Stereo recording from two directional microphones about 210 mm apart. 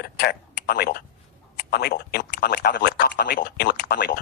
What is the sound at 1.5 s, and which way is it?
A man's voice, 50° left (ahead or behind).